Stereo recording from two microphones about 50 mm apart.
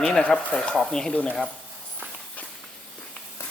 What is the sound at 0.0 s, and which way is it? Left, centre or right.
Speech, centre.